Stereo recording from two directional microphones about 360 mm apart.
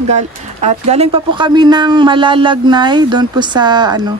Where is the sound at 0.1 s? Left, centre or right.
Centre.